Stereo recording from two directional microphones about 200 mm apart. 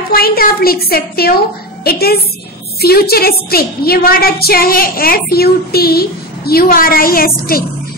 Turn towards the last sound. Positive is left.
turn(degrees=45)  # may be behind; listen again after turning